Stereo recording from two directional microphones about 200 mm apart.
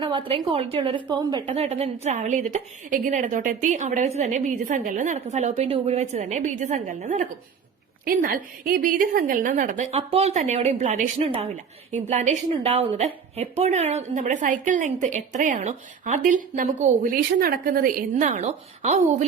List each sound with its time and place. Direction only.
0.0 s a woman's voice: 25° right (ahead or behind)
1.5 s a woman's voice: 30° right (ahead or behind)